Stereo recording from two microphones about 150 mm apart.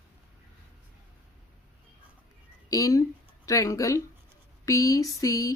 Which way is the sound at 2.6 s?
25° left (ahead or behind).